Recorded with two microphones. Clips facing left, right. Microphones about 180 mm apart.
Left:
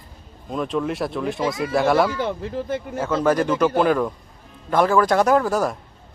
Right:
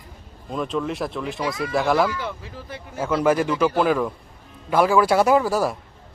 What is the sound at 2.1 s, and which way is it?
Speech, 50° left (ahead or behind).